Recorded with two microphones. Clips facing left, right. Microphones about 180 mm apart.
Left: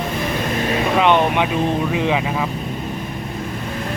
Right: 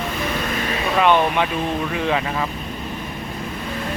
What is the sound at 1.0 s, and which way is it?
Speech, 20° left (ahead or behind).